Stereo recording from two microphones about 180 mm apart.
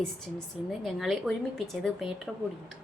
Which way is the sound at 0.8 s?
Centre (ahead or behind).